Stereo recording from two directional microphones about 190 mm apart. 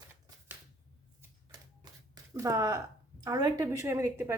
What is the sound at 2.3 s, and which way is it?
A woman's voice, 15° right (ahead or behind).